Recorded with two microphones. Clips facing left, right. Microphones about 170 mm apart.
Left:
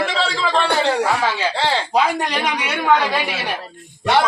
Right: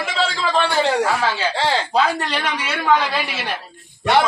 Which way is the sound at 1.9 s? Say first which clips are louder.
Left 1 dB; 15° left (ahead or behind).